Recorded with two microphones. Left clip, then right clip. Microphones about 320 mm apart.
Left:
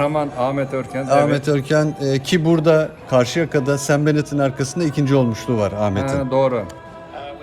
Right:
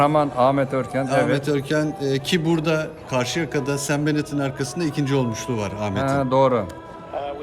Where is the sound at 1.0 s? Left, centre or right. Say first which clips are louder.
Left 6 dB; centre.